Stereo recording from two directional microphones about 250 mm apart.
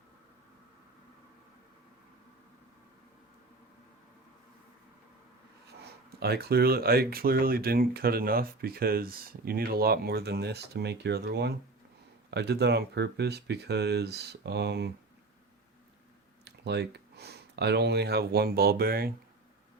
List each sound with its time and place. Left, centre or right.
6.1 s speech: right
16.4 s speech: right